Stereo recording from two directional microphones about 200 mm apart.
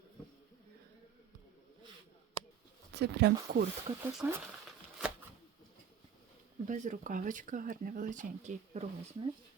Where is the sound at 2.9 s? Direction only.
55° right (ahead or behind).